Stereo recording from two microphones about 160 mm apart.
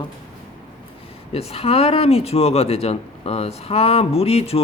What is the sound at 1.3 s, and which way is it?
Speech, 40° left (ahead or behind).